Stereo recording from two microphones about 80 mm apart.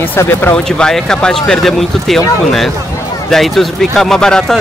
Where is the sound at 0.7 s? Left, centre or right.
Centre.